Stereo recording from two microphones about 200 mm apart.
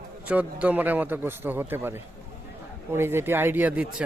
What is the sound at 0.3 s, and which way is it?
A man's voice, 10° right (ahead or behind).